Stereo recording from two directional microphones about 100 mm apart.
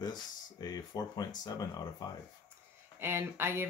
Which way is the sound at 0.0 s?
45° left (ahead or behind).